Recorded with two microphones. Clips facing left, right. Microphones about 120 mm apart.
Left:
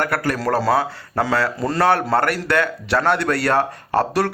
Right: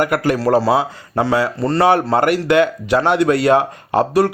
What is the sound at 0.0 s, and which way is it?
A man's voice, 15° right (ahead or behind).